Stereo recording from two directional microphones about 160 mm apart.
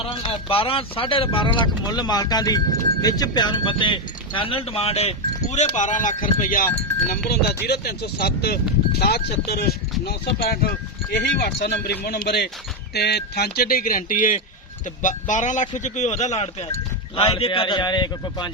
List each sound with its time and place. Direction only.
0.0 s speech: 35° left (ahead or behind); by 6.7 s 60° left (ahead or behind)
6.7 s speech: 10° left (ahead or behind)
7.3 s speech: 85° left
11.4 s a man's voice: 85° left; by 18.5 s 25° left (ahead or behind)